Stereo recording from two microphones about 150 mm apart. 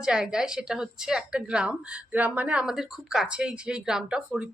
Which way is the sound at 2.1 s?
10° right (ahead or behind).